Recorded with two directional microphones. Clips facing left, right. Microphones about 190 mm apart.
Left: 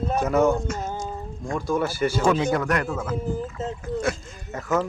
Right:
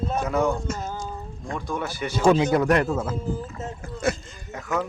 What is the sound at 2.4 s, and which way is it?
Speech, 20° right (ahead or behind).